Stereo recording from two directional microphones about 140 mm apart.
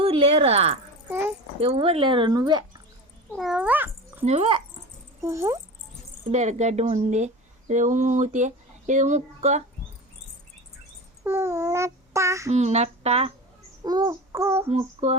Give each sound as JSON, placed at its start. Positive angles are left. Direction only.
{"t": 0.0, "sound": "speech", "side_deg": -45}
{"t": 3.3, "sound": "speech", "side_deg": -5}
{"t": 4.3, "sound": "speech", "side_deg": -40}
{"t": 5.2, "sound": "child singing", "side_deg": -20}
{"t": 6.3, "sound": "speech", "side_deg": -55}
{"t": 11.2, "sound": "child singing", "side_deg": -20}
{"t": 12.5, "sound": "speech", "side_deg": -50}
{"t": 13.8, "sound": "child singing", "side_deg": -25}
{"t": 14.7, "sound": "speech", "side_deg": -50}